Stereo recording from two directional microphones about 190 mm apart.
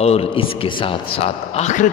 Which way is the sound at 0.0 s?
30° left (ahead or behind).